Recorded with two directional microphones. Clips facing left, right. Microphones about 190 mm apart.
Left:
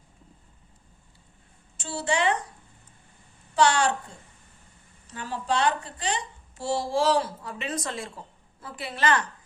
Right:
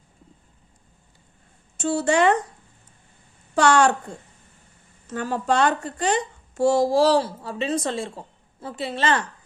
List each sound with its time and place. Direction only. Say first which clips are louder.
1.7 s speech: right 8 dB; 50° right (ahead or behind)
3.5 s a woman's voice: right 4 dB; 45° right (ahead or behind)
5.0 s a woman's voice: right 6 dB; 50° right (ahead or behind); by 9.2 s 25° right (ahead or behind)